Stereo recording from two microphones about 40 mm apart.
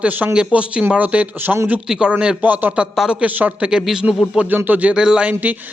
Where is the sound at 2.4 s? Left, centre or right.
Right.